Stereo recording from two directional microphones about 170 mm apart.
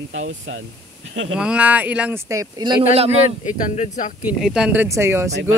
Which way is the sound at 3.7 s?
45° left (ahead or behind).